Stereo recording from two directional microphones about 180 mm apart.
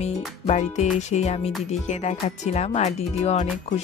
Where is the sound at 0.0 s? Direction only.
40° left (ahead or behind).